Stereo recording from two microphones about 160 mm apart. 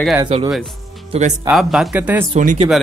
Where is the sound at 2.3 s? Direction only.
45° right (ahead or behind).